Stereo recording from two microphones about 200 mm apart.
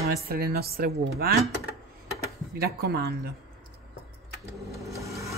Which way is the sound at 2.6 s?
55° right (ahead or behind).